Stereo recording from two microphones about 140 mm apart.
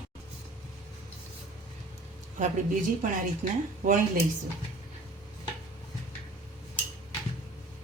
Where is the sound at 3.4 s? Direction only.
55° right (ahead or behind).